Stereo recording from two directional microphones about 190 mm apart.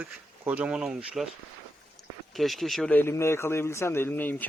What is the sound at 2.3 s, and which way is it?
Speech, centre (ahead or behind).